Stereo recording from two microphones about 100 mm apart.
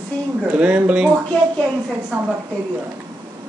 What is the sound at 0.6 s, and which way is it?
Speech, 15° right (ahead or behind).